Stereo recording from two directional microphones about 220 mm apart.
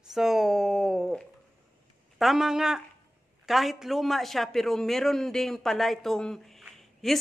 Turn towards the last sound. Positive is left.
turn(degrees=0)  # may be behind; listen again after turning